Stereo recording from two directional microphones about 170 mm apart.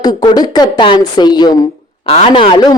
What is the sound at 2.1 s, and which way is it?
Speech, 35° left (ahead or behind).